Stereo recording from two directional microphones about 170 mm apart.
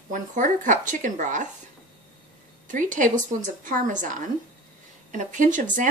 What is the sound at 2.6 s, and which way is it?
Speech, 50° right (ahead or behind).